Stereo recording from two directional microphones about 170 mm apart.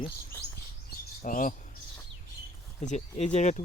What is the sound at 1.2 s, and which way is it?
Speech, 50° left (ahead or behind).